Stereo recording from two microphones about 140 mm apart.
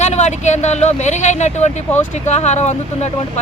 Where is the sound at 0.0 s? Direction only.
55° left (ahead or behind).